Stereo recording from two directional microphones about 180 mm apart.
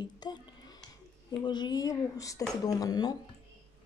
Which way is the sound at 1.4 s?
25° left (ahead or behind).